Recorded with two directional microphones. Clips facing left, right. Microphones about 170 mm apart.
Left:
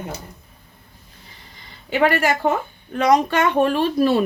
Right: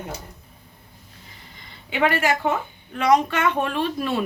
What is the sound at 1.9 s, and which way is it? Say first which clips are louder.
A woman's voice: left 3 dB; 40° left (ahead or behind).